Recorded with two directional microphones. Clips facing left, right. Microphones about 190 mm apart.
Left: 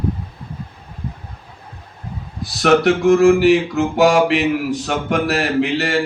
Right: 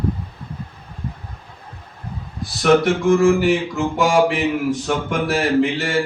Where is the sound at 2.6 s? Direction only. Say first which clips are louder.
Left 2 dB; 65° left (ahead or behind).